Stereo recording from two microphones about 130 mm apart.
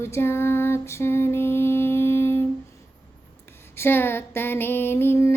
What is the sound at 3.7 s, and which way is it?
Female singing, 20° left (ahead or behind).